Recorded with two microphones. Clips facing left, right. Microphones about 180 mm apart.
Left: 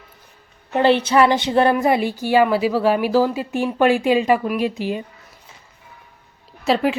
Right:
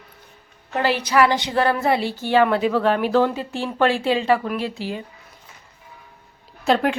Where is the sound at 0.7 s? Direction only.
25° left (ahead or behind).